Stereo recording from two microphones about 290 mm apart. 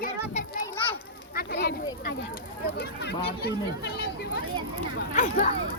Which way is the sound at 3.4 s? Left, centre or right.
Left.